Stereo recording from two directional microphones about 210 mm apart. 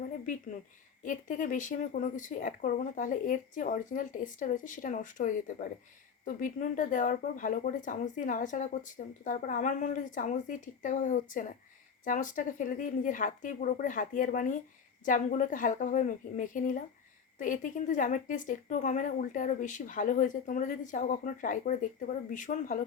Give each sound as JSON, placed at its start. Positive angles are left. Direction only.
{"t": 1.0, "sound": "speech", "side_deg": 40}